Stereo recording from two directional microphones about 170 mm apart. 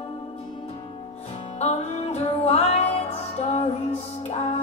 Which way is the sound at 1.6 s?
40° left (ahead or behind).